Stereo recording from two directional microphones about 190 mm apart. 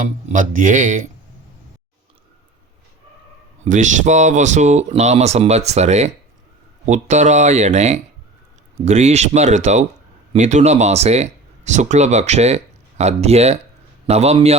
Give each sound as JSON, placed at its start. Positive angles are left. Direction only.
{"t": 0.0, "sound": "speech", "side_deg": -45}
{"t": 3.6, "sound": "speech", "side_deg": -40}